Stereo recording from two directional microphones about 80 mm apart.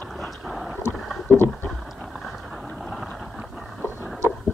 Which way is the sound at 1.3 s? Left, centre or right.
Left.